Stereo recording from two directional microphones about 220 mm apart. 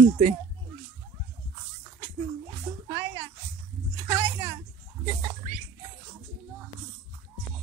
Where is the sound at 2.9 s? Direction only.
15° right (ahead or behind).